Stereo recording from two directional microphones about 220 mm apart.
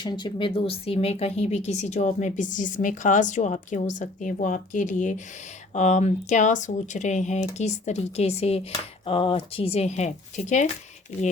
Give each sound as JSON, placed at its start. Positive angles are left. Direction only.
{"t": 0.0, "sound": "speech", "side_deg": 20}